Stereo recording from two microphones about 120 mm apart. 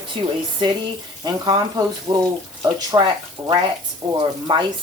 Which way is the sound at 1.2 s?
35° right (ahead or behind).